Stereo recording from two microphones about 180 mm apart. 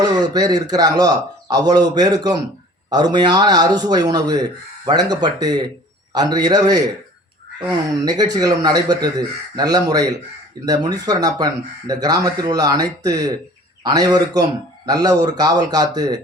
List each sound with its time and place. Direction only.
0.0 s speech: 20° right (ahead or behind)
8.0 s speech: 20° right (ahead or behind)